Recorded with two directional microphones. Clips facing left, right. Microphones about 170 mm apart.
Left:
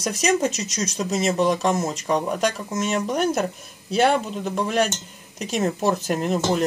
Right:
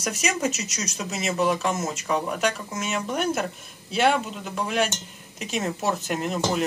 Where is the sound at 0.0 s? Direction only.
35° left (ahead or behind).